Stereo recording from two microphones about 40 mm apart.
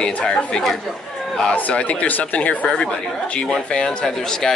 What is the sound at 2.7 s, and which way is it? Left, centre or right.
Speech, centre.